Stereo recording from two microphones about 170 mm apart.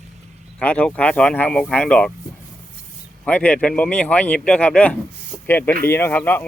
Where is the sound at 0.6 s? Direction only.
10° left (ahead or behind).